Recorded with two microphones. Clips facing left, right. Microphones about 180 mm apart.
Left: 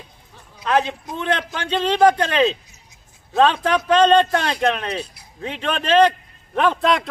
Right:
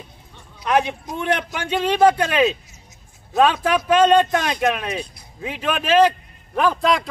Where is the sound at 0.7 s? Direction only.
15° right (ahead or behind).